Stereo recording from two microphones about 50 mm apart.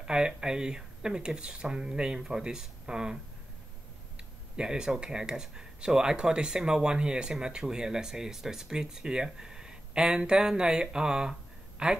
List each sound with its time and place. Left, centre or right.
0.0 s speech: centre
4.6 s speech: centre